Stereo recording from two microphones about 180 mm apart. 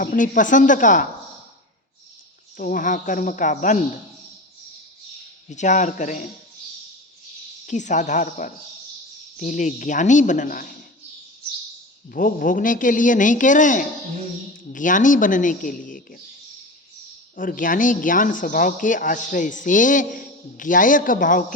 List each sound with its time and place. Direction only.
0.0 s speech: 50° left (ahead or behind)
2.6 s speech: 50° left (ahead or behind)
5.5 s speech: 40° left (ahead or behind)
7.7 s speech: 45° left (ahead or behind)
12.1 s speech: 50° left (ahead or behind)
17.3 s speech: 50° left (ahead or behind)